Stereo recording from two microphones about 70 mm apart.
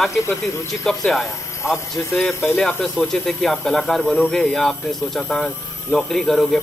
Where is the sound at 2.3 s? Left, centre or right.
Left.